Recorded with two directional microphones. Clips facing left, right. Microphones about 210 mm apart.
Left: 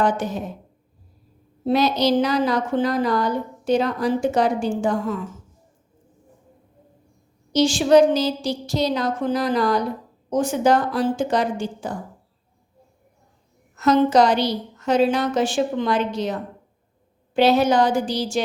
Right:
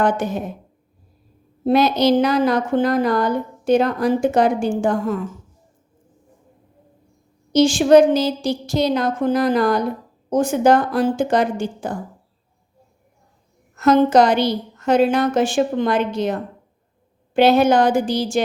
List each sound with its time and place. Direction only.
0.0 s a woman's voice: 55° right (ahead or behind)
1.6 s a woman's voice: 55° right (ahead or behind)
7.5 s a woman's voice: 55° right (ahead or behind)
13.7 s a woman's voice: 55° right (ahead or behind)